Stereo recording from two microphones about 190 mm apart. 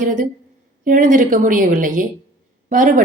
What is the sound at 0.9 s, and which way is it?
Speech, 45° right (ahead or behind).